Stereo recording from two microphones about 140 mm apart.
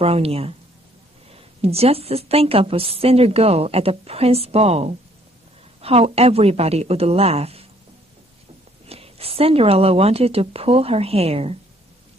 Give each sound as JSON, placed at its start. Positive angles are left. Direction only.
{"t": 0.0, "sound": "a woman's voice", "side_deg": -45}
{"t": 8.8, "sound": "a woman's voice", "side_deg": -45}